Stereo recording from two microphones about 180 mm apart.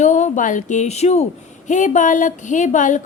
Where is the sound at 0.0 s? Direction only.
40° left (ahead or behind).